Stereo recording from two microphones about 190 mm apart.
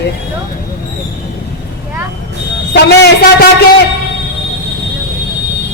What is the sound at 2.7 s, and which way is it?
Speech, 60° left (ahead or behind).